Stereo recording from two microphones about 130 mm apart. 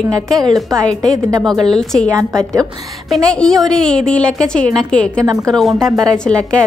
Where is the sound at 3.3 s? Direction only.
5° left (ahead or behind).